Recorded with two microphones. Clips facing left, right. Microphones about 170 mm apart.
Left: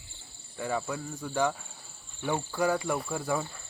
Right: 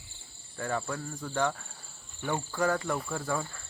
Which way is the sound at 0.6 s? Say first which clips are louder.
Left 1 dB; 10° left (ahead or behind).